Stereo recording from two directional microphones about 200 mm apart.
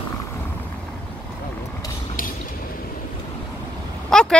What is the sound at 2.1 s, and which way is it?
Mechanisms, 45° left (ahead or behind).